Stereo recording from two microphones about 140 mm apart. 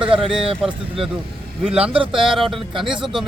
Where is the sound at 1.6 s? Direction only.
5° right (ahead or behind).